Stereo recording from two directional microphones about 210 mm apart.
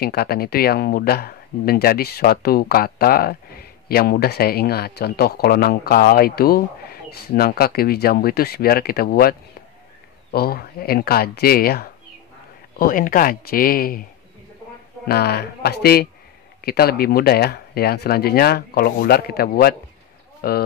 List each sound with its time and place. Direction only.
0.0 s speech: 45° left (ahead or behind)
15.0 s speech: 50° left (ahead or behind)